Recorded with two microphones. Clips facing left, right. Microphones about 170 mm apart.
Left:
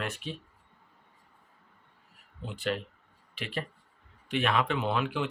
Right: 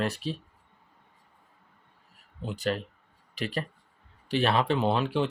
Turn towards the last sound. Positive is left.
turn(degrees=-30)  # may be behind; listen again after turning